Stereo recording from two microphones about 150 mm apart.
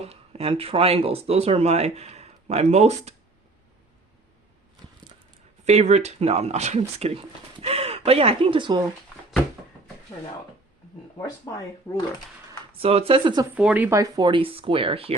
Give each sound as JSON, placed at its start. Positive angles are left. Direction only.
{"t": 0.0, "sound": "speech", "side_deg": -40}
{"t": 5.6, "sound": "speech", "side_deg": -50}
{"t": 12.8, "sound": "speech", "side_deg": -40}
{"t": 13.6, "sound": "speech", "side_deg": -10}
{"t": 14.0, "sound": "speech", "side_deg": -30}